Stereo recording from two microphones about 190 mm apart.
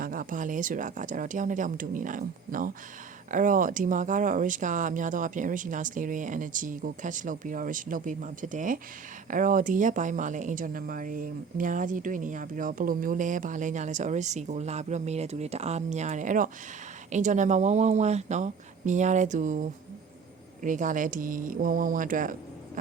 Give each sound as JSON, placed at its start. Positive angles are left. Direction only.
{"t": 0.0, "sound": "speech", "side_deg": -45}